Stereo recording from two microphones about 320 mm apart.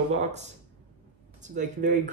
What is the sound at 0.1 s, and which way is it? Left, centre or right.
Speech, right.